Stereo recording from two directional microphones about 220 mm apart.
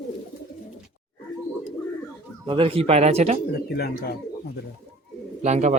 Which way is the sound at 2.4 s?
25° right (ahead or behind).